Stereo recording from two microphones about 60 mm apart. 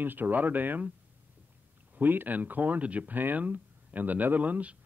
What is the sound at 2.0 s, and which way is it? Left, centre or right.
A man's voice, right.